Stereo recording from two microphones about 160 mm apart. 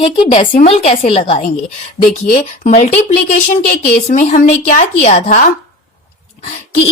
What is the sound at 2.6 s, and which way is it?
Speech, 45° left (ahead or behind).